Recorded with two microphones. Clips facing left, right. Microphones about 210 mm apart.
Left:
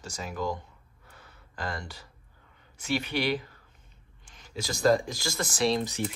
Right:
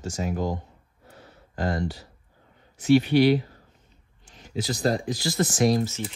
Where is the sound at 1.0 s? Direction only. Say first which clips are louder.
Right 7 dB; 40° right (ahead or behind).